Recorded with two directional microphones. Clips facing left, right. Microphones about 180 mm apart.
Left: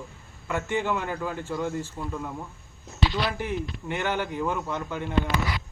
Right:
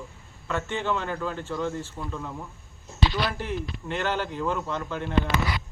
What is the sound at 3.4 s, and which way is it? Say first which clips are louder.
Speech: left 1 dB; 15° left (ahead or behind).